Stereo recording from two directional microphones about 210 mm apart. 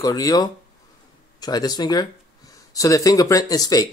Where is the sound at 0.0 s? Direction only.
15° left (ahead or behind).